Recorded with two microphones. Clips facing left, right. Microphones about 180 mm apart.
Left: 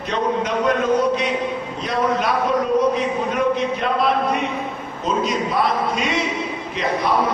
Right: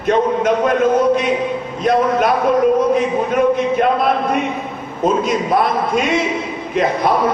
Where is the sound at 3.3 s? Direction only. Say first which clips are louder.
Right 8 dB; 50° right (ahead or behind).